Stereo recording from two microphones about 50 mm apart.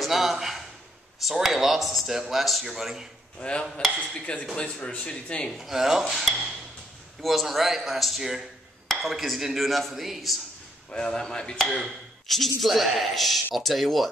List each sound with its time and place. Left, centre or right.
0.0 s a sound: centre
1.2 s speech: centre
3.3 s speech: centre
5.5 s speech: centre
10.9 s a man's voice: centre